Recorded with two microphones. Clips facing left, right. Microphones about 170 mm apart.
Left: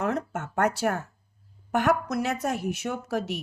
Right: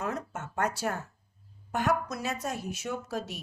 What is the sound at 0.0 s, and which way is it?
Speech, 65° left (ahead or behind).